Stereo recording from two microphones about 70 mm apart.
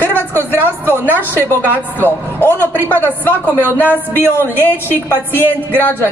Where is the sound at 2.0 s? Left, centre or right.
Left.